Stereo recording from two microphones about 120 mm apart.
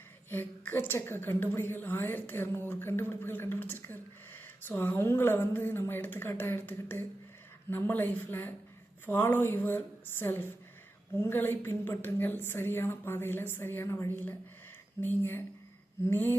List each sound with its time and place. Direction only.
0.3 s a woman's voice: 20° left (ahead or behind)